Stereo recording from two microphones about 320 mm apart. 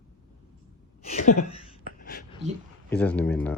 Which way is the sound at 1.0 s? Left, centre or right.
Left.